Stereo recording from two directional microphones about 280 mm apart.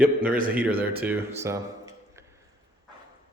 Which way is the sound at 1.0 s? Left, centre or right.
Centre.